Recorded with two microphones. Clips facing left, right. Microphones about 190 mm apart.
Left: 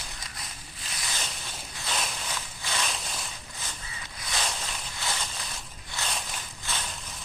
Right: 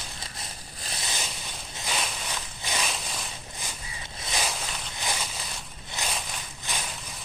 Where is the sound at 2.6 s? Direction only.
15° right (ahead or behind).